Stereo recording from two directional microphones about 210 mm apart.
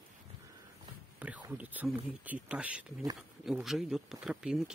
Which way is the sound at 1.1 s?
5° right (ahead or behind).